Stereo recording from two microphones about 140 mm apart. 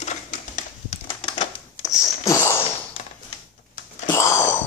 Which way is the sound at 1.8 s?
25° left (ahead or behind).